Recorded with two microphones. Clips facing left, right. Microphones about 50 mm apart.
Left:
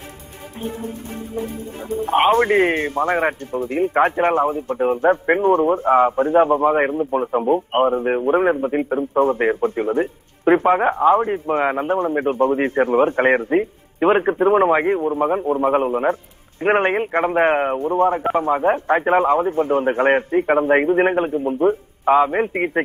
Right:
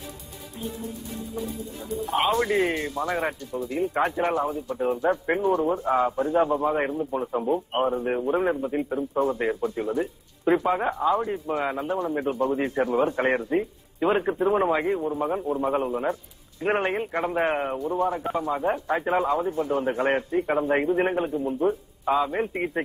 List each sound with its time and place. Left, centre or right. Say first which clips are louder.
0.6 s speech: left 6 dB; left